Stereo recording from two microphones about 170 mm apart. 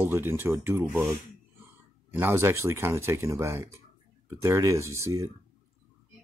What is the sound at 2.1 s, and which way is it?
Speech, 15° right (ahead or behind).